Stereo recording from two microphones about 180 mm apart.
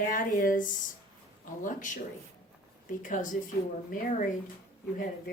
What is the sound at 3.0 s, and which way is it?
A woman's voice, 45° left (ahead or behind).